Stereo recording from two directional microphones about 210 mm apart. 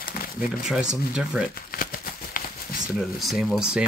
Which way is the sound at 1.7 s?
40° left (ahead or behind).